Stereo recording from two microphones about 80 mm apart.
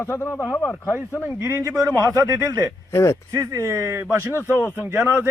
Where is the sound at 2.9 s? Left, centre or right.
Left.